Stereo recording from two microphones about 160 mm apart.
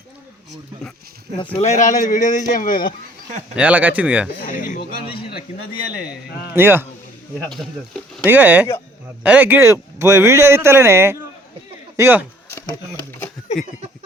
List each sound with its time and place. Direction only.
1.5 s speech: 40° left (ahead or behind); by 2.9 s 60° left (ahead or behind)
3.5 s speech: 10° right (ahead or behind)
4.4 s speech: 60° left (ahead or behind)
6.1 s speech: 15° right (ahead or behind)
7.3 s speech: centre (ahead or behind)
8.3 s speech: 10° right (ahead or behind)
13.1 s a sound: 15° left (ahead or behind)